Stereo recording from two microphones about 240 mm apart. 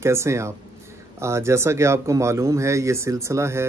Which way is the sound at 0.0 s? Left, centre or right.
Centre.